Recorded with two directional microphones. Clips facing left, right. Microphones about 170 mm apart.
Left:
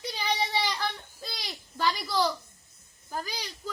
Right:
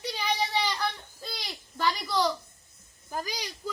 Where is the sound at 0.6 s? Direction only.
Centre (ahead or behind).